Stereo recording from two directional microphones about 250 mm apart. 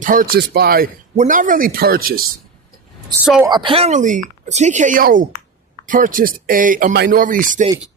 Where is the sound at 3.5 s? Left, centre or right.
Centre.